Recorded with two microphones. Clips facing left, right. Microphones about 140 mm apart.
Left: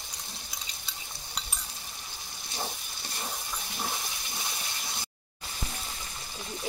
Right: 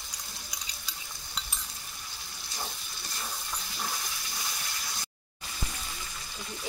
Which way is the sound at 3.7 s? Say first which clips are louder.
Left 2 dB; 20° left (ahead or behind).